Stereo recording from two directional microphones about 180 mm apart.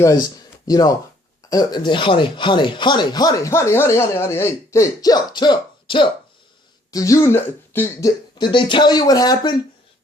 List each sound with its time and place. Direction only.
0.0 s speech: 20° left (ahead or behind)
8.4 s speech: 25° left (ahead or behind)